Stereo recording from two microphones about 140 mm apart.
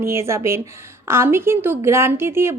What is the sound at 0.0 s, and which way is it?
A woman's voice, 20° right (ahead or behind).